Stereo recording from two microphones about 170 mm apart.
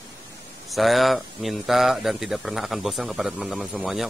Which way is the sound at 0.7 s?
Centre (ahead or behind).